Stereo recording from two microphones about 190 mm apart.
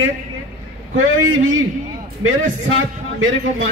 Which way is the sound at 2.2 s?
90° right.